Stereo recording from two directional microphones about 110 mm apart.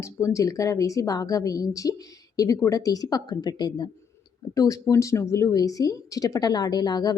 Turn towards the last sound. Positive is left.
turn(degrees=40)  # may be behind; listen again after turning